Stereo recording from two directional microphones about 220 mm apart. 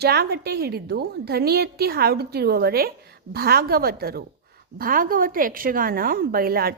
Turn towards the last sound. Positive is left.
turn(degrees=-45)  # may be behind; listen again after turning